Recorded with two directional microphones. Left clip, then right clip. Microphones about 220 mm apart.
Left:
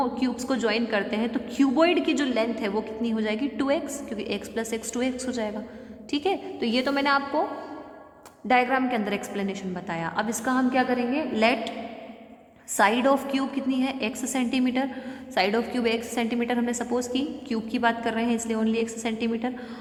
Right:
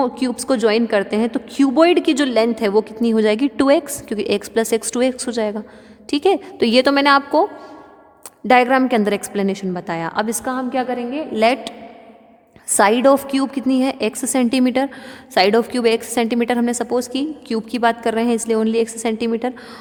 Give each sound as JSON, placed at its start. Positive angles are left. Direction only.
{"t": 0.0, "sound": "a woman's voice", "side_deg": -45}
{"t": 8.4, "sound": "a woman's voice", "side_deg": -50}
{"t": 12.7, "sound": "a woman's voice", "side_deg": -45}